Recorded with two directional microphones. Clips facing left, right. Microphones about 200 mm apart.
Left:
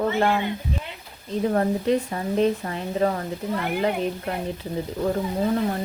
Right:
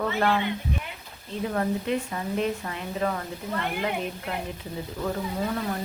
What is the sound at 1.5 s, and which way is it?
Speech, 35° left (ahead or behind).